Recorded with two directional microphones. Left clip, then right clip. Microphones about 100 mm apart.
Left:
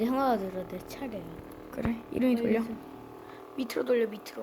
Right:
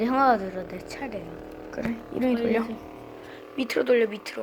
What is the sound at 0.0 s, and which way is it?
A woman's voice, 40° left (ahead or behind).